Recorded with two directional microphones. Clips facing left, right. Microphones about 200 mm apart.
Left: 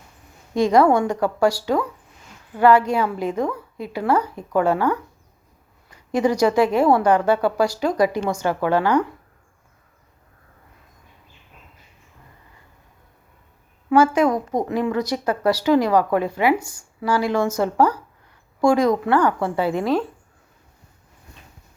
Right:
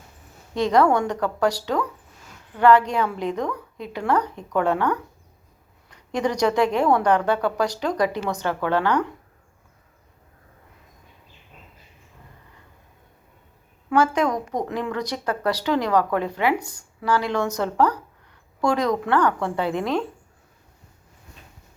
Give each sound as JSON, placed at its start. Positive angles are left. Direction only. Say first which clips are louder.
{"t": 0.5, "sound": "a woman's voice", "louder": "left 3 dB", "side_deg": 10}
{"t": 13.9, "sound": "a woman's voice", "louder": "left 4 dB", "side_deg": 10}